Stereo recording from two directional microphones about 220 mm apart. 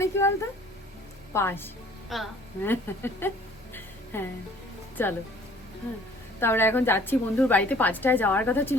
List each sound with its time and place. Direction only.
0.0 s a woman's voice: 10° left (ahead or behind)
3.8 s a sound: 10° left (ahead or behind)
5.0 s a woman's voice: 10° left (ahead or behind)
6.4 s a woman's voice: 10° left (ahead or behind)